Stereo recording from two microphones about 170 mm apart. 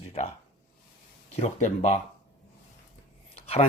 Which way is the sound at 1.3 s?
40° left (ahead or behind).